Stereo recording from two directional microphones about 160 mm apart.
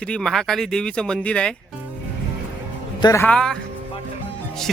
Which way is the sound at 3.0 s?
20° left (ahead or behind).